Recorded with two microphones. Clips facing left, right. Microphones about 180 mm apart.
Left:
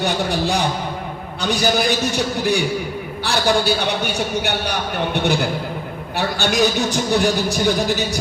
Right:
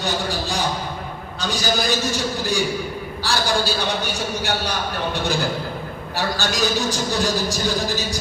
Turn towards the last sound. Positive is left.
turn(degrees=60)  # may be behind; listen again after turning